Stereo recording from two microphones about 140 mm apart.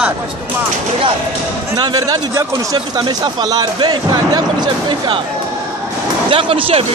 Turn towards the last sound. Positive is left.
turn(degrees=-40)  # may be behind; listen again after turning